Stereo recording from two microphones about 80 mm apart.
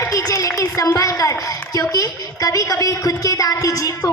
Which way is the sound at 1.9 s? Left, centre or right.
Left.